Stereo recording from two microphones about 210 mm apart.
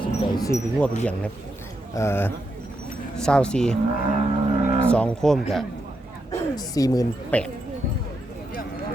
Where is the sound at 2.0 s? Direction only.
10° left (ahead or behind).